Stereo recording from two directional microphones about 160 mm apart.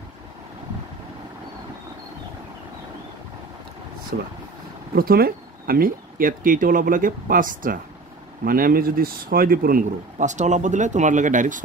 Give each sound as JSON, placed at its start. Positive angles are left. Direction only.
{"t": 4.9, "sound": "speech", "side_deg": -65}